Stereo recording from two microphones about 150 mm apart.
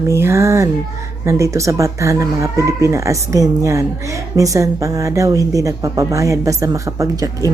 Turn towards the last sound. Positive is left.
turn(degrees=-25)  # may be behind; listen again after turning